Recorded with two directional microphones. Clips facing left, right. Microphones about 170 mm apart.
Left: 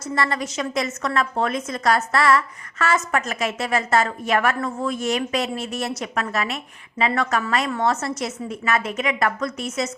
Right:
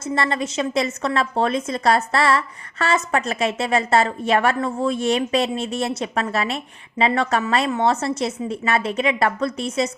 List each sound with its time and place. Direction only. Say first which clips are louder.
0.0 s a woman's voice: right 2 dB; 25° right (ahead or behind)